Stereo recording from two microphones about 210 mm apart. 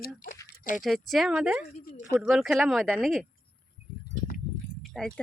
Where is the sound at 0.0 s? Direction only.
40° left (ahead or behind).